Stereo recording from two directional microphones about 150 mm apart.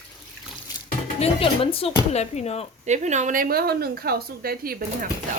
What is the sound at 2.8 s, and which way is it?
Speech, 50° right (ahead or behind).